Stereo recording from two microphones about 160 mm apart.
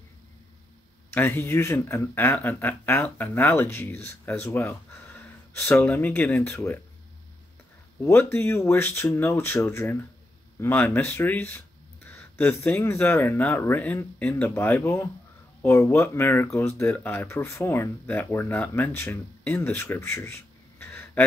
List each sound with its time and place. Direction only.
1.1 s speech: 15° left (ahead or behind)
8.0 s speech: 15° left (ahead or behind)